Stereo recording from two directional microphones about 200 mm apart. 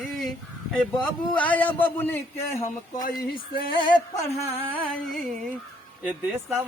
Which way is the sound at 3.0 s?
45° left (ahead or behind).